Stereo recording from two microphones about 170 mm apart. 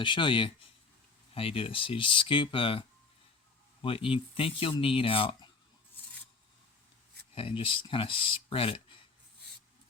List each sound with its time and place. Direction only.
0.0 s speech: 30° left (ahead or behind)
7.3 s speech: 30° left (ahead or behind)